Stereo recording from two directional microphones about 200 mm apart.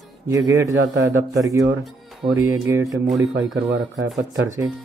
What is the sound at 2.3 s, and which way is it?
Speech, 15° right (ahead or behind).